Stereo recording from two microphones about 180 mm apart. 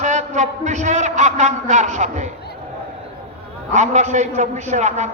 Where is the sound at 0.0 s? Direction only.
40° right (ahead or behind).